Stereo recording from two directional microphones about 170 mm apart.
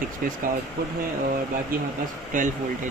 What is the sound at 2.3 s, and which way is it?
Speech, 50° right (ahead or behind).